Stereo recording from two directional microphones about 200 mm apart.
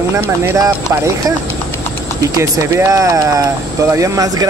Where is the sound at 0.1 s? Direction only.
15° right (ahead or behind).